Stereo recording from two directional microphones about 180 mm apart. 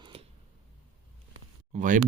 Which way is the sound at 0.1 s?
35° right (ahead or behind).